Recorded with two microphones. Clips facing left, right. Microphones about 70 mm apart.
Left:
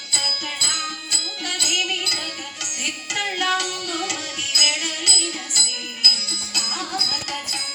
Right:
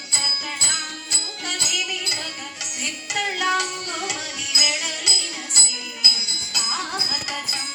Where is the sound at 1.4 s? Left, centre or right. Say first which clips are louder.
Left 2 dB; right.